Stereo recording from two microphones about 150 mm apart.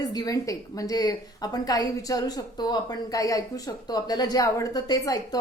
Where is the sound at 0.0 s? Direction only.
25° left (ahead or behind).